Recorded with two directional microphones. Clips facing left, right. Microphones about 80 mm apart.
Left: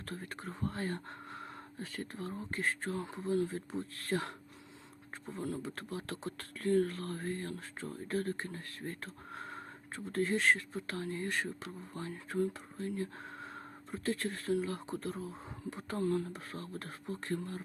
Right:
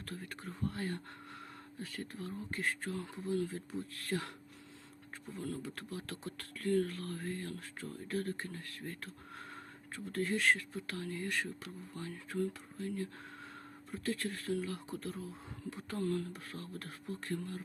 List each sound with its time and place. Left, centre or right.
0.0 s speech: left
5.6 s speech: left